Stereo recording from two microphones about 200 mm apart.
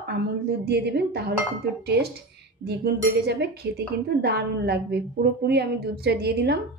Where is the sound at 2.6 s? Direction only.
55° right (ahead or behind).